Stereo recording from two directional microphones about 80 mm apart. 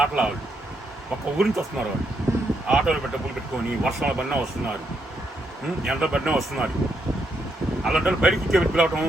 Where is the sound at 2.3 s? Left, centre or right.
Right.